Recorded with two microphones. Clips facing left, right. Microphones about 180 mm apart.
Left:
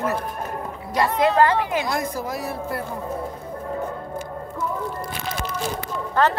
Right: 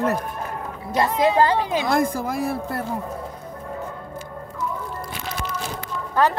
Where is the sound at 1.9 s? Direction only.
50° right (ahead or behind).